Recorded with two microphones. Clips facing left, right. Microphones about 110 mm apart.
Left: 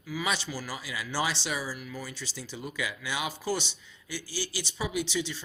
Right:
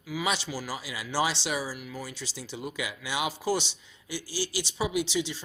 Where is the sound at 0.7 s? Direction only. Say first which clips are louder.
Right 1 dB; 25° right (ahead or behind).